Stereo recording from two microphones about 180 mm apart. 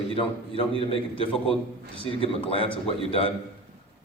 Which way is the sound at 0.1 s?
30° left (ahead or behind).